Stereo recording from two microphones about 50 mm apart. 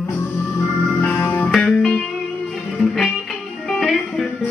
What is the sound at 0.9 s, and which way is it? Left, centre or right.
Music, left.